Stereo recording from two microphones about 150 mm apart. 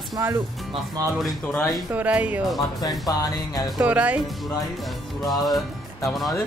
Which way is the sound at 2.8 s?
25° left (ahead or behind).